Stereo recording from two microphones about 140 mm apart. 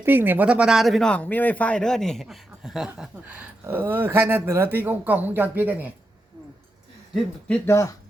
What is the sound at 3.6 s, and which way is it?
Speech, 15° right (ahead or behind).